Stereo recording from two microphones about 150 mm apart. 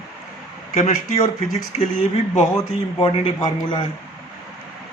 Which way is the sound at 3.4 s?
30° left (ahead or behind).